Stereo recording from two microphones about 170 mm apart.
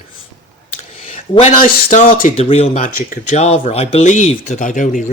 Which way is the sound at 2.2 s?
35° left (ahead or behind).